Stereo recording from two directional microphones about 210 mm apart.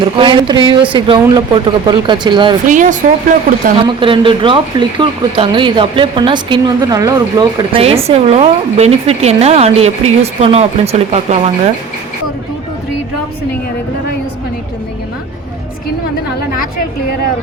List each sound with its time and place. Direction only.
0.0 s speech: 25° right (ahead or behind)
2.6 s speech: 35° right (ahead or behind)
3.8 s speech: 25° right (ahead or behind)